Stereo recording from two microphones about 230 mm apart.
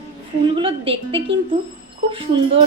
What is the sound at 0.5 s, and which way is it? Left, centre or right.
Speech, right.